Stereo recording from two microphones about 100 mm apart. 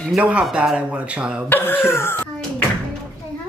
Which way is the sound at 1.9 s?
25° left (ahead or behind).